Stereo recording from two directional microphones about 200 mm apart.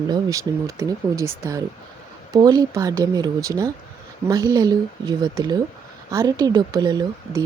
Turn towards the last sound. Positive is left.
turn(degrees=-20)  # may be behind; listen again after turning